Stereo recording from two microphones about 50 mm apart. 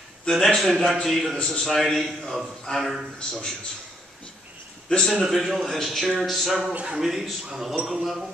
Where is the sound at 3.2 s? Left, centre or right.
Centre.